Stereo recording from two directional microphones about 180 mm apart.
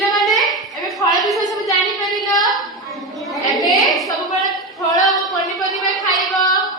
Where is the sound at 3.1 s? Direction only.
Centre (ahead or behind).